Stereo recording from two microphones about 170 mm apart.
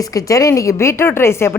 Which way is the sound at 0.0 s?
20° left (ahead or behind).